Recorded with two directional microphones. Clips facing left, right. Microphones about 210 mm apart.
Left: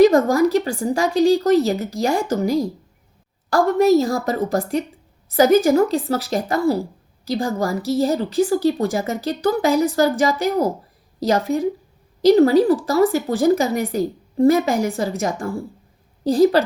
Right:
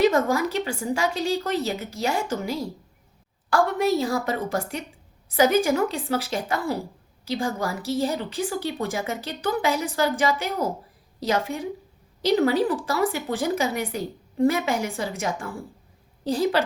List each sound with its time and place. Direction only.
0.0 s a woman's voice: 45° left (ahead or behind)
16.3 s a woman's voice: 40° left (ahead or behind)